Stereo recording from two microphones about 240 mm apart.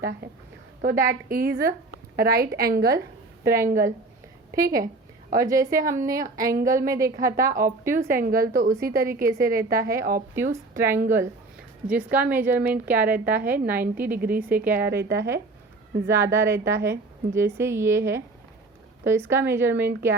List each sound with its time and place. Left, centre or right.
0.2 s a woman's voice: right
4.5 s a woman's voice: centre
8.1 s a woman's voice: right
8.7 s a woman's voice: centre
9.0 s a woman's voice: right
10.3 s a woman's voice: centre